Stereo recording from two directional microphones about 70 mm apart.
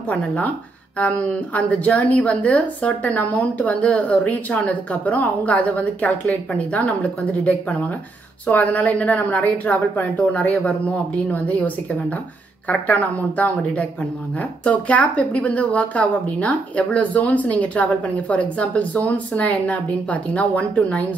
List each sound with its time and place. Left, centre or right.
0.1 s a woman's voice: left